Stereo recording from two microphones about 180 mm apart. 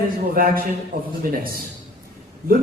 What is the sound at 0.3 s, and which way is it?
Speech, 55° right (ahead or behind).